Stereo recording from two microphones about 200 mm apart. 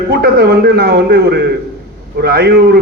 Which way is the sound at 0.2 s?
50° right (ahead or behind).